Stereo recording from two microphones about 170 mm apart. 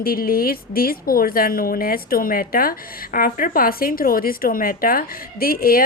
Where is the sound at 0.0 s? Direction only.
60° left (ahead or behind).